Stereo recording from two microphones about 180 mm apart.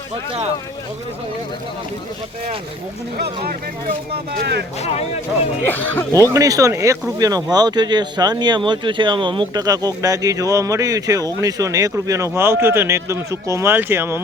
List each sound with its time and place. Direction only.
3.4 s speech: 60° right (ahead or behind)
4.8 s speech: 35° left (ahead or behind)
6.2 s speech: 20° right (ahead or behind)